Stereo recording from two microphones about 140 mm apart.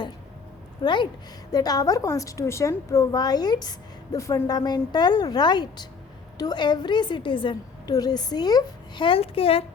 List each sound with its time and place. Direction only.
1.5 s a woman's voice: 25° left (ahead or behind); by 9.6 s 45° left (ahead or behind)